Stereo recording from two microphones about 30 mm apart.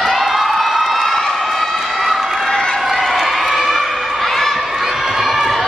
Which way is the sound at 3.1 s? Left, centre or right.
Centre.